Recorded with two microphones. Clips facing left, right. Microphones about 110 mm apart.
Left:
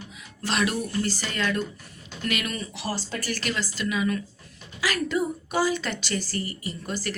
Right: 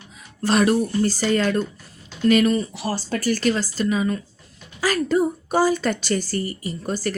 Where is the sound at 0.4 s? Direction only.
40° right (ahead or behind).